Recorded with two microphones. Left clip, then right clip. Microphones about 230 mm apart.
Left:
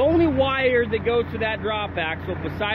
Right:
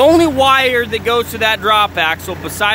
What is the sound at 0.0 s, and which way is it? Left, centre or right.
Speech, right.